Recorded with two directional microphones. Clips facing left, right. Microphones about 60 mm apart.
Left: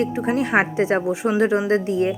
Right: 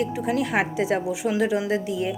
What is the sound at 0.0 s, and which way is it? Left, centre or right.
A woman's voice, left.